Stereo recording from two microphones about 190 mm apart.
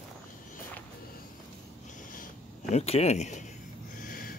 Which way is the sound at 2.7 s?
35° left (ahead or behind).